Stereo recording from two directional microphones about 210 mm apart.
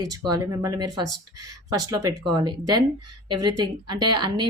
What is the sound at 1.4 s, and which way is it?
Speech, 90° right.